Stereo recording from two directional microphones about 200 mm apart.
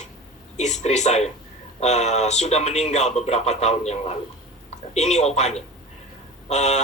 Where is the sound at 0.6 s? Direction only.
35° left (ahead or behind).